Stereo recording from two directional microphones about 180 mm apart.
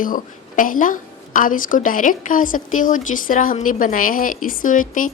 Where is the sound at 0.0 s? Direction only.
50° left (ahead or behind).